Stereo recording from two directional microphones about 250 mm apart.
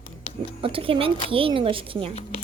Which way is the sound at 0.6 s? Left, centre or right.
Right.